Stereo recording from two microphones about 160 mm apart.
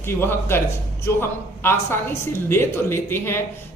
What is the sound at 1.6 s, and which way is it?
A woman's voice, 15° left (ahead or behind).